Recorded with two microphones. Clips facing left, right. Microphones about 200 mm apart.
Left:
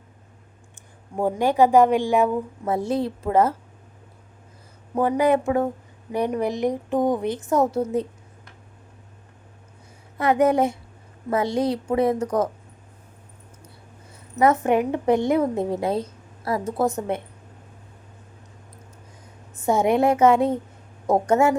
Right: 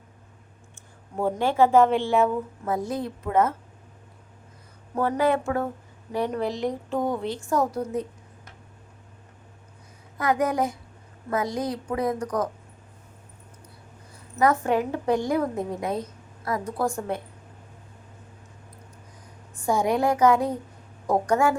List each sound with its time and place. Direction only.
0.8 s speech: 15° left (ahead or behind)
2.6 s a woman's voice: 30° left (ahead or behind)
4.9 s a woman's voice: 15° left (ahead or behind)
10.2 s a woman's voice: 25° left (ahead or behind)
14.1 s a woman's voice: 25° left (ahead or behind)
19.5 s a woman's voice: 20° left (ahead or behind)